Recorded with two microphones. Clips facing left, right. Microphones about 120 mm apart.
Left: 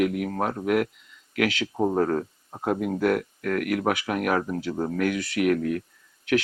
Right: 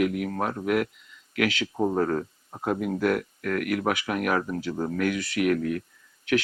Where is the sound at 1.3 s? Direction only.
50° left (ahead or behind).